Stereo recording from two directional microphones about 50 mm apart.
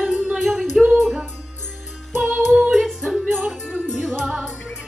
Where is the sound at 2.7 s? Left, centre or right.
Centre.